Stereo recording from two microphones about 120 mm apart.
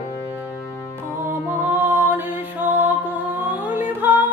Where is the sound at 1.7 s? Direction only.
20° right (ahead or behind).